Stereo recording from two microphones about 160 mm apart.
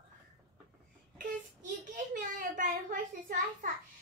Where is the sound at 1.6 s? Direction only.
55° right (ahead or behind).